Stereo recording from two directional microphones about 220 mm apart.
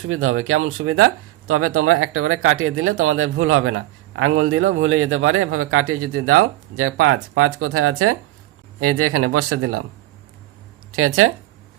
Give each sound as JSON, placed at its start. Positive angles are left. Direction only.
{"t": 0.0, "sound": "a man's voice", "side_deg": -65}
{"t": 8.8, "sound": "speech", "side_deg": -90}
{"t": 10.9, "sound": "a man's voice", "side_deg": -70}